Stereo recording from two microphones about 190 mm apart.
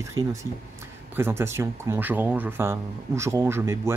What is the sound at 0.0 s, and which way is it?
Speech, 15° right (ahead or behind).